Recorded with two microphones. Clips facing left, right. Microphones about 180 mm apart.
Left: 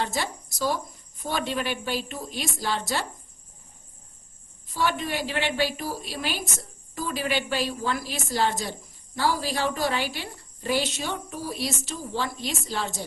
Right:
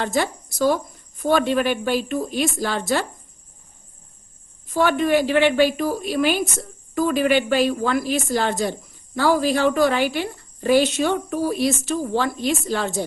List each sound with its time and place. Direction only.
0.0 s speech: 50° right (ahead or behind)
4.7 s speech: 55° right (ahead or behind)